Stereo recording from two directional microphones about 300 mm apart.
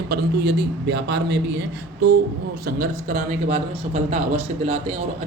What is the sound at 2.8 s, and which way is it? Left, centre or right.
Speech, right.